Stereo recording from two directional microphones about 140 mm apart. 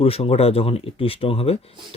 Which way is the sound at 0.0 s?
45° left (ahead or behind).